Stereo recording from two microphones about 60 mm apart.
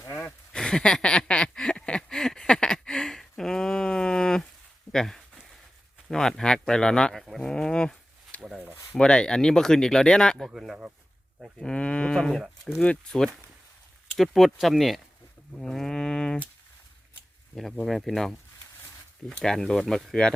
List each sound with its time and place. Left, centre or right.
0.3 s a sound: centre
6.1 s speech: centre
7.2 s livestock: centre
8.5 s a sound: right
9.0 s speech: centre
10.5 s a sound: centre
11.6 s livestock: centre
12.8 s speech: left
14.2 s speech: centre
15.5 s a sound: centre
17.5 s speech: centre
19.4 s speech: centre